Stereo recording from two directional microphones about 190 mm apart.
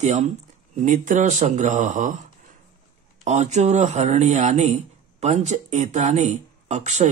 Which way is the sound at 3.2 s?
35° right (ahead or behind).